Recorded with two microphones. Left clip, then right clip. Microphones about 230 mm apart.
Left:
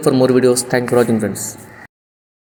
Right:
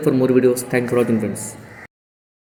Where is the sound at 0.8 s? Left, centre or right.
Left.